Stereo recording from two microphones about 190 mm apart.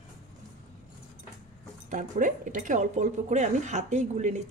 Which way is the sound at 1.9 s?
40° right (ahead or behind).